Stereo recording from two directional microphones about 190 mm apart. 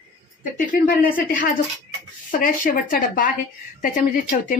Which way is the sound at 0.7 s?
55° left (ahead or behind).